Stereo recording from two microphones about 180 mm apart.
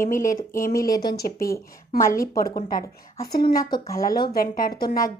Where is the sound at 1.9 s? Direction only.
50° left (ahead or behind).